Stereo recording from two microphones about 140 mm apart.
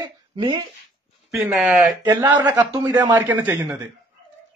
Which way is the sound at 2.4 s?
15° right (ahead or behind).